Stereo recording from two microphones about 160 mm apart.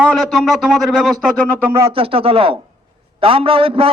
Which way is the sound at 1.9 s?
35° right (ahead or behind).